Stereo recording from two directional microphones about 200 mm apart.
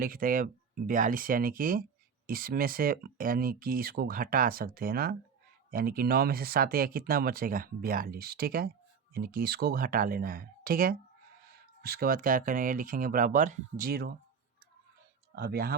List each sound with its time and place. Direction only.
0.0 s speech: 45° right (ahead or behind)
15.4 s speech: 50° right (ahead or behind)